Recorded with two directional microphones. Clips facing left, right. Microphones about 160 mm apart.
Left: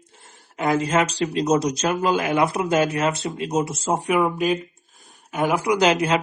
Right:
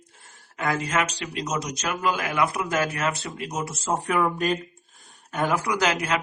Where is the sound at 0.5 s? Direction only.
20° left (ahead or behind).